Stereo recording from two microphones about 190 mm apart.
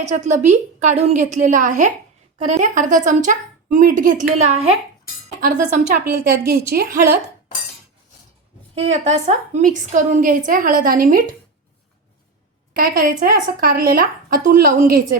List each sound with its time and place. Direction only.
0.0 s a woman's voice: 40° right (ahead or behind); by 7.0 s 55° right (ahead or behind)
8.7 s a woman's voice: 35° right (ahead or behind)
12.7 s a woman's voice: 45° right (ahead or behind)